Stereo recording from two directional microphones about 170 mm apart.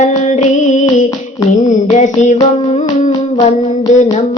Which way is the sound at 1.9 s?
45° left (ahead or behind).